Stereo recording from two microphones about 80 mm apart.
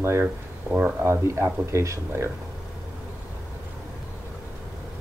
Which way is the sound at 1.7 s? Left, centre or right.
Right.